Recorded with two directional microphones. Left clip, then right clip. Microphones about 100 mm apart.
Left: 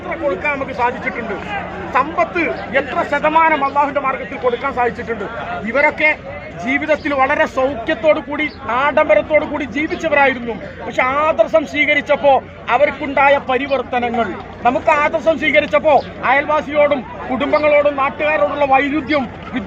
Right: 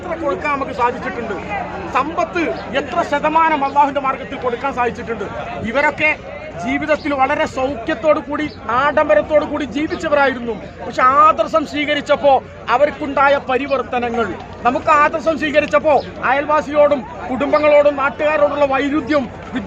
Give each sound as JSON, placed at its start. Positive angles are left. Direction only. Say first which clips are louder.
{"t": 0.1, "sound": "speech", "louder": "left 1 dB", "side_deg": 0}
{"t": 4.6, "sound": "a man's voice", "louder": "left 1 dB", "side_deg": 15}
{"t": 6.7, "sound": "speech", "louder": "left 1 dB", "side_deg": 0}
{"t": 8.0, "sound": "a man's voice", "louder": "left 1 dB", "side_deg": -15}
{"t": 14.6, "sound": "a man's voice", "louder": "right 1 dB", "side_deg": -35}